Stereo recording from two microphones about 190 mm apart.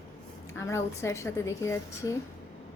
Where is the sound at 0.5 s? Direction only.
15° left (ahead or behind).